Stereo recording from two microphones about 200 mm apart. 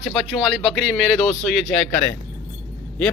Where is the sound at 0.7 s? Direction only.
Centre (ahead or behind).